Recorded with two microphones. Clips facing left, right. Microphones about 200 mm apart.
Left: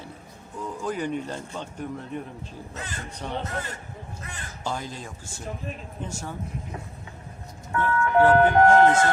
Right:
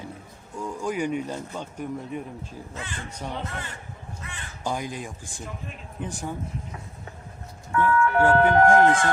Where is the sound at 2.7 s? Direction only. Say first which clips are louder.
Even; 40° left (ahead or behind).